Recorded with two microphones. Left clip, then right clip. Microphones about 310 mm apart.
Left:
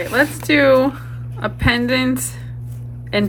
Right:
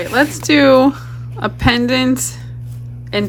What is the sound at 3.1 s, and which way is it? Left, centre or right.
Speech, centre.